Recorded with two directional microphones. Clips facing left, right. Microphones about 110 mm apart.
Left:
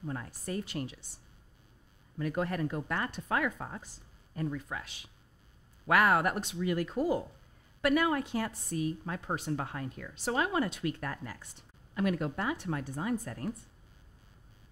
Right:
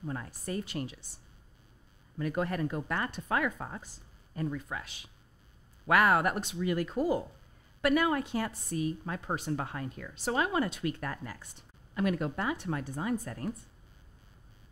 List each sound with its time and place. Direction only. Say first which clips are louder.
0.0 s a woman's voice: right 1 dB; 20° right (ahead or behind)
2.1 s a woman's voice: right 1 dB; 15° right (ahead or behind)